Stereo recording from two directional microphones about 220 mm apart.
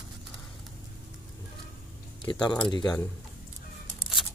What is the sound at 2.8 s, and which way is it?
Speech, 5° left (ahead or behind).